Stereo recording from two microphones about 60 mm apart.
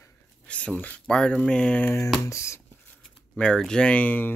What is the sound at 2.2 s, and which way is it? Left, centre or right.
Speech, left.